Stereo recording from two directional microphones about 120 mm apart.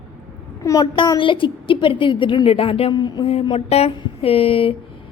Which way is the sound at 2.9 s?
35° left (ahead or behind).